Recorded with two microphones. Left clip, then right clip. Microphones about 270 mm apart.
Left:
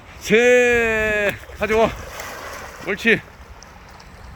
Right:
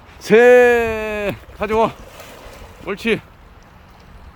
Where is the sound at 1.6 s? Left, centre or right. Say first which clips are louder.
Right 1 dB; centre.